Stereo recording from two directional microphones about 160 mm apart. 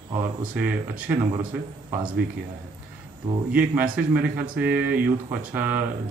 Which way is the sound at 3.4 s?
10° right (ahead or behind).